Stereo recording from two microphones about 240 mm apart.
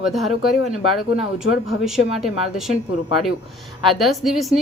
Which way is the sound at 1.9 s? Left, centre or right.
Centre.